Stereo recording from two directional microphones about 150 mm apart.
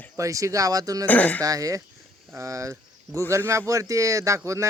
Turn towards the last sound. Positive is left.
turn(degrees=-20)  # may be behind; listen again after turning